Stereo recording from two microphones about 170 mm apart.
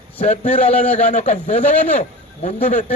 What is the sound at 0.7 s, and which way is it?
Speech, 10° left (ahead or behind).